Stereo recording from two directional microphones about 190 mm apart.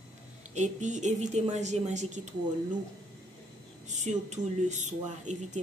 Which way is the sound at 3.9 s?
35° right (ahead or behind).